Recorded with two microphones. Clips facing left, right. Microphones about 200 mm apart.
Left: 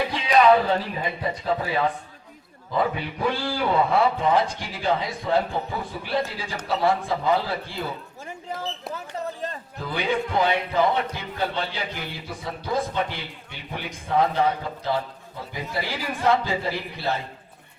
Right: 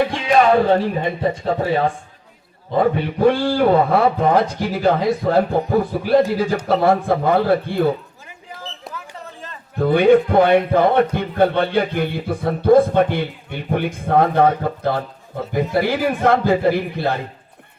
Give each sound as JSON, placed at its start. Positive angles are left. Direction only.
{"t": 0.0, "sound": "a man's voice", "side_deg": -50}
{"t": 9.7, "sound": "speech", "side_deg": -55}